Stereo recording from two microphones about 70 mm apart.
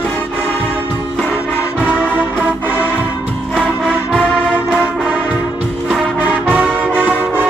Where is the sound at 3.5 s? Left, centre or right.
Centre.